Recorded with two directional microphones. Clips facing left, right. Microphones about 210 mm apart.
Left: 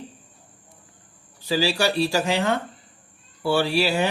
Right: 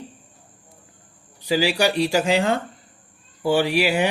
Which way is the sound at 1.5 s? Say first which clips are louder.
Right 2 dB; 20° right (ahead or behind).